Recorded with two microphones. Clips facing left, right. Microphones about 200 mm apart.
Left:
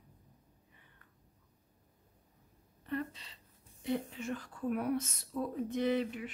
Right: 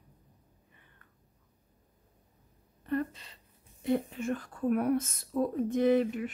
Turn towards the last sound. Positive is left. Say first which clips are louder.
# right 7 dB
turn(degrees=-50)  # may be behind; listen again after turning